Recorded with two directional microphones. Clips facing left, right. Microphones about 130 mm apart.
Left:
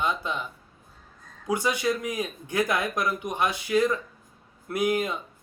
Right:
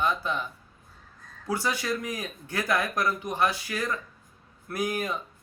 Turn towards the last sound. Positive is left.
turn(degrees=20)  # may be behind; listen again after turning